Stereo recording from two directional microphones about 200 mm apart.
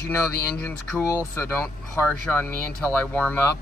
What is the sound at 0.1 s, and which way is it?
Speech, 10° left (ahead or behind).